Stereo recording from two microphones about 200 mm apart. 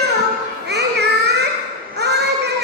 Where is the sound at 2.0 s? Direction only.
55° right (ahead or behind).